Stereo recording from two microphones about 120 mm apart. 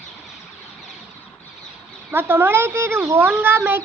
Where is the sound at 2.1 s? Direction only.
20° right (ahead or behind).